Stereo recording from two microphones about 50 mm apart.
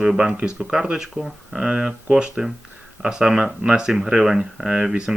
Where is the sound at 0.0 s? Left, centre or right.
Centre.